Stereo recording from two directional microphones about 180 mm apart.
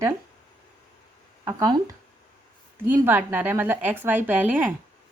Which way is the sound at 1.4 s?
20° right (ahead or behind).